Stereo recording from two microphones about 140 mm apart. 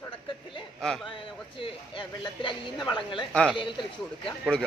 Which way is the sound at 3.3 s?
5° left (ahead or behind).